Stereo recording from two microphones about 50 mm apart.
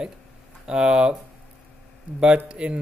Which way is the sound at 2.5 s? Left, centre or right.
Right.